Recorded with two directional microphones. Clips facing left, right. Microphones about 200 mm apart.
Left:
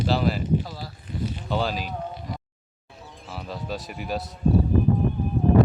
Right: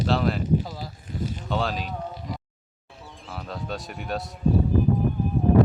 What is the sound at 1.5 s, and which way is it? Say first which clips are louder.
Speech: left 1 dB; centre (ahead or behind).